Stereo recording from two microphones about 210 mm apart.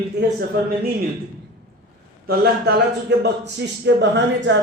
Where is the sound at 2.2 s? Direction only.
50° right (ahead or behind).